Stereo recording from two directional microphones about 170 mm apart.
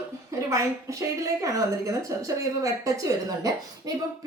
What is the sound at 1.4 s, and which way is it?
A man's voice, 20° right (ahead or behind).